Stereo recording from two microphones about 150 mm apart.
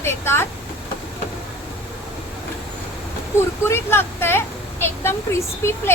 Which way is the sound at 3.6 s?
15° left (ahead or behind).